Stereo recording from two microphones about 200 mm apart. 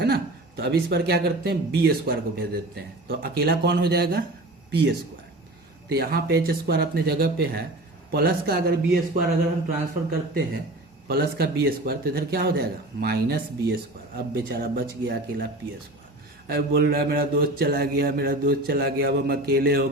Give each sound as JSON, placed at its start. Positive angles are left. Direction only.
{"t": 0.0, "sound": "speech", "side_deg": -55}
{"t": 16.5, "sound": "speech", "side_deg": -50}